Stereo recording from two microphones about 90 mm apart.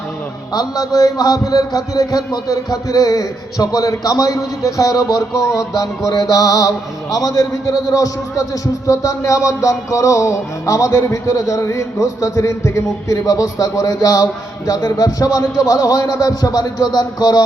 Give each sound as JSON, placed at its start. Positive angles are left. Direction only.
{"t": 0.5, "sound": "a man's voice", "side_deg": 45}